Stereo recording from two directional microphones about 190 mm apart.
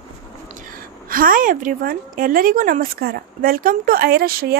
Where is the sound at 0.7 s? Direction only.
45° right (ahead or behind).